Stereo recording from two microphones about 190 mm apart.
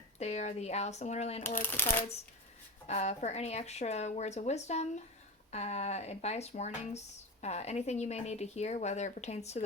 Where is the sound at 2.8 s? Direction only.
35° left (ahead or behind).